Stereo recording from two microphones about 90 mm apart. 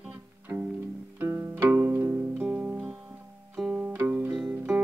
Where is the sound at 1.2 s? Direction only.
30° right (ahead or behind).